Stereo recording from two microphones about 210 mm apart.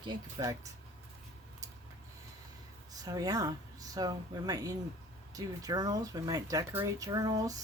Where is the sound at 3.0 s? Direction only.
15° right (ahead or behind).